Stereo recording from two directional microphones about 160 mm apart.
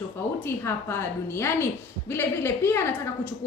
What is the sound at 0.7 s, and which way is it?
A woman's voice, 15° left (ahead or behind).